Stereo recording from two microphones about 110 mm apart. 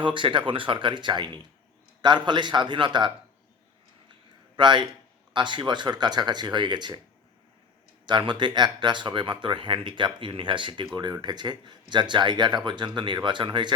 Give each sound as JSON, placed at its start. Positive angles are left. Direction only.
{"t": 0.0, "sound": "speech", "side_deg": -50}
{"t": 4.5, "sound": "speech", "side_deg": -45}
{"t": 8.0, "sound": "speech", "side_deg": -45}